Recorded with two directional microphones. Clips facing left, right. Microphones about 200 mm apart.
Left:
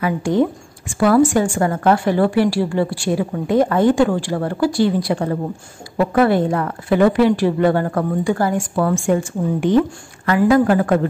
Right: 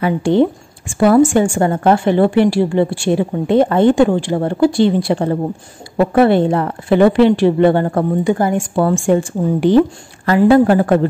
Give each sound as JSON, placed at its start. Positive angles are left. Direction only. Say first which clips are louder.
{"t": 0.0, "sound": "a woman's voice", "louder": "right 4 dB", "side_deg": -30}